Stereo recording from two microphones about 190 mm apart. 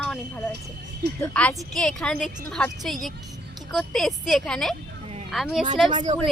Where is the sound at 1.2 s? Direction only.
5° left (ahead or behind).